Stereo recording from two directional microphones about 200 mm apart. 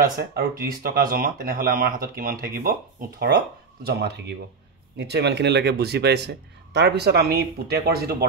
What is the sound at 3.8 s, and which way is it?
Speech, 55° right (ahead or behind).